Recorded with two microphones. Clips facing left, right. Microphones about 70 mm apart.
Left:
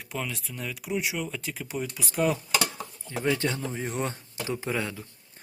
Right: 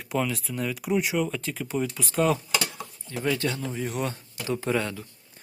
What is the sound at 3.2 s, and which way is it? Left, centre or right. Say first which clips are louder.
Speech: even; left.